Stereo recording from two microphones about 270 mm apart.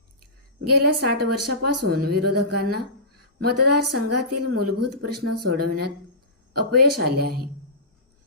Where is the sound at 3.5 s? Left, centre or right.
Right.